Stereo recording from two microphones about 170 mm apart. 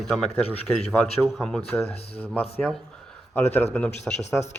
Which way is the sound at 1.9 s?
35° left (ahead or behind).